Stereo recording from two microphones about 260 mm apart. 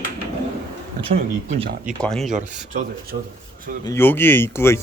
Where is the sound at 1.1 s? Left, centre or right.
Right.